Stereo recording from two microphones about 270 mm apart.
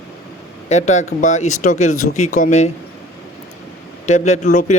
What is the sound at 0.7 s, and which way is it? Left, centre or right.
Speech, left.